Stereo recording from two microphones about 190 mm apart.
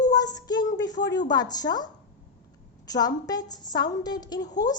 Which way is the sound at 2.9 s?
20° left (ahead or behind).